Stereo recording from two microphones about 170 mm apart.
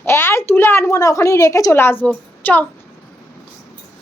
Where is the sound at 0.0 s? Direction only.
15° left (ahead or behind).